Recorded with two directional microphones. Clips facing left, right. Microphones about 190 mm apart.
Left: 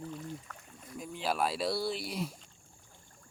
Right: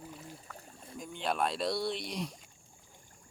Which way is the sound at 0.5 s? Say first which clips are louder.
Even; 30° right (ahead or behind).